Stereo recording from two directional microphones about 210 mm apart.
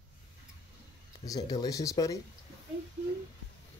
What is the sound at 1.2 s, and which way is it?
Speech, 15° left (ahead or behind).